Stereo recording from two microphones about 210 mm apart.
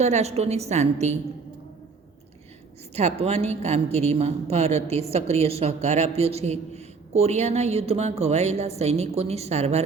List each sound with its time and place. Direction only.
0.0 s a woman's voice: 30° right (ahead or behind)
2.9 s a woman's voice: 30° right (ahead or behind)